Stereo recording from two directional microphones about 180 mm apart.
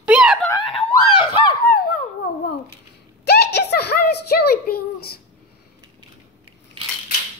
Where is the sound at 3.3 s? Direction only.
65° left (ahead or behind).